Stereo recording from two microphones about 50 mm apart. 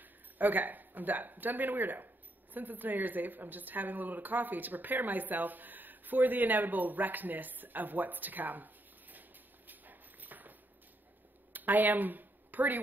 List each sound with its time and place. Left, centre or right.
0.0 s a woman's voice: right
9.7 s dog: right
11.5 s speech: right